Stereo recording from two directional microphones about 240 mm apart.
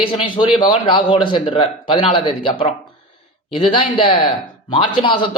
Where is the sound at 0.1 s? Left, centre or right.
Centre.